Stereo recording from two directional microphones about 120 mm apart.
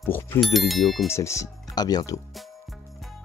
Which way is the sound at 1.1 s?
25° left (ahead or behind).